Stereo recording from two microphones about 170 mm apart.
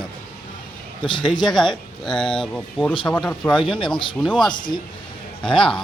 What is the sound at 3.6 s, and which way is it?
Speech, 30° left (ahead or behind).